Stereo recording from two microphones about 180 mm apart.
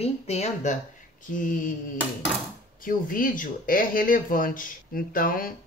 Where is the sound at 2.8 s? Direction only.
50° left (ahead or behind).